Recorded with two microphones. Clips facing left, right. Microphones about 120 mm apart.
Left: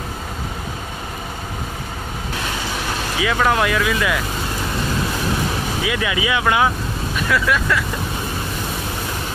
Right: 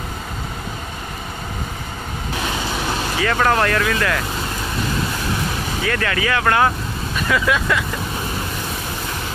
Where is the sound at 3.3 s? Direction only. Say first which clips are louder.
Even; 5° left (ahead or behind).